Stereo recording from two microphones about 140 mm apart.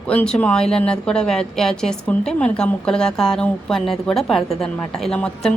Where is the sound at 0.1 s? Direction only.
10° left (ahead or behind).